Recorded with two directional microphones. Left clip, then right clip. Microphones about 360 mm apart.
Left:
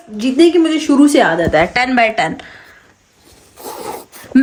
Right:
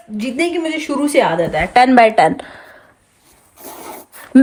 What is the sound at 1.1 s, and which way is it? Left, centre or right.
Speech, centre.